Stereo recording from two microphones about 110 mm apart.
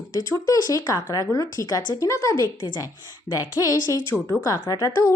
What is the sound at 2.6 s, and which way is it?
Speech, 40° left (ahead or behind).